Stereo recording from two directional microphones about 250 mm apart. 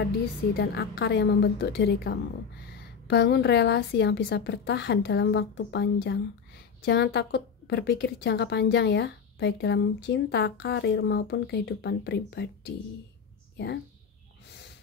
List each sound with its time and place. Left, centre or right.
0.6 s a woman's voice: left